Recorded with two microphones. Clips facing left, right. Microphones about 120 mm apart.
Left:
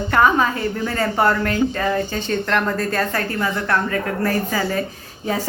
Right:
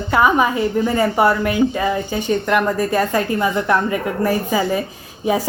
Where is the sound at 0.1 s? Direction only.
10° right (ahead or behind).